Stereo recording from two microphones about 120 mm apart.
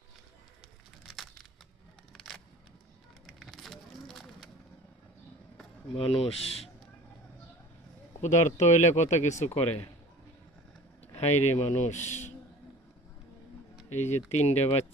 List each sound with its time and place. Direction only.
1.0 s a sound: centre (ahead or behind)
3.2 s crackle: centre (ahead or behind)
5.9 s speech: 55° left (ahead or behind)
8.2 s speech: 80° left
9.4 s speech: 60° left (ahead or behind)
11.1 s speech: 65° left (ahead or behind)
13.9 s speech: 70° left (ahead or behind)